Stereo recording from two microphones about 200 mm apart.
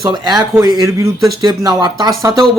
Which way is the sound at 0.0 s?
20° right (ahead or behind).